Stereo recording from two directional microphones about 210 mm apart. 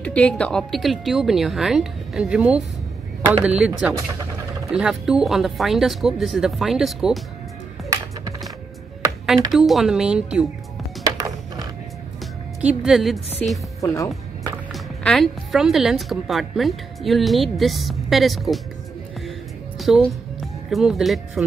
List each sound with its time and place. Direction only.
0.0 s speech: 5° left (ahead or behind)
9.5 s speech: centre (ahead or behind)
11.1 s music: 20° right (ahead or behind)
12.6 s speech: centre (ahead or behind)
13.7 s speech: 15° left (ahead or behind)
14.7 s speech: centre (ahead or behind)
19.8 s a woman's voice: centre (ahead or behind)